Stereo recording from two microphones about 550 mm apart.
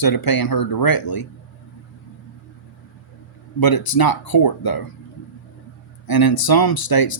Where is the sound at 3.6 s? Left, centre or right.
Left.